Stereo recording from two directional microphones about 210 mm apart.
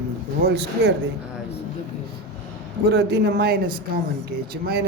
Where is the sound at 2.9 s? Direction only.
50° right (ahead or behind).